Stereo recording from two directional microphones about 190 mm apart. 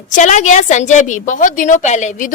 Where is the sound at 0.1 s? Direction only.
40° left (ahead or behind).